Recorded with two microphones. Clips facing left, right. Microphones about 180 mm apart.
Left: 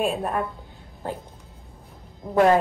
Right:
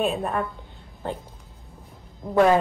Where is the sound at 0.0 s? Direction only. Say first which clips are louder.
Even; 5° left (ahead or behind).